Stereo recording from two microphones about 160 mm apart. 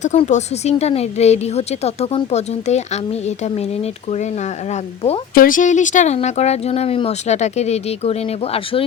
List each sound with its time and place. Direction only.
0.0 s a woman's voice: 45° left (ahead or behind)
4.7 s speech: 40° left (ahead or behind)
5.3 s a woman's voice: 60° left (ahead or behind); by 8.8 s 40° left (ahead or behind)